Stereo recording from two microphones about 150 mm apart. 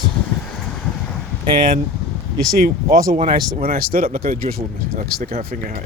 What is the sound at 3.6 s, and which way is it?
Speech, 80° right.